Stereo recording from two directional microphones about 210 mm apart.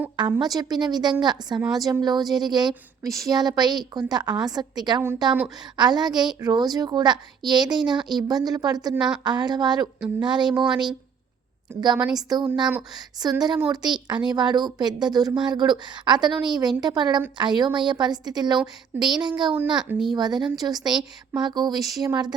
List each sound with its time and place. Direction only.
0.4 s a woman's voice: 15° right (ahead or behind)
11.9 s speech: 5° right (ahead or behind)
12.7 s a woman's voice: 20° right (ahead or behind)
19.5 s speech: 10° right (ahead or behind)
20.1 s a woman's voice: 20° right (ahead or behind)